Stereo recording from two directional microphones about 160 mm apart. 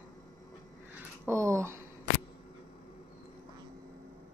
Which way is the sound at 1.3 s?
20° right (ahead or behind).